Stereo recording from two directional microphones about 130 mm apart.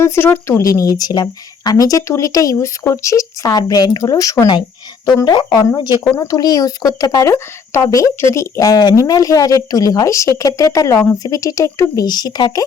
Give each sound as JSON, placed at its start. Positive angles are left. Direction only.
{"t": 0.0, "sound": "speech", "side_deg": 20}